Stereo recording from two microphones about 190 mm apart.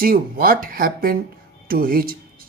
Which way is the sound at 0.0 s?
50° right (ahead or behind).